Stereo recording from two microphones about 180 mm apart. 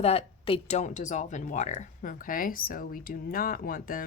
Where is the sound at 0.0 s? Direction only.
35° left (ahead or behind).